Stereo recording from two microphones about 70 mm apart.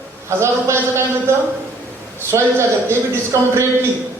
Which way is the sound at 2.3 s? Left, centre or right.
Right.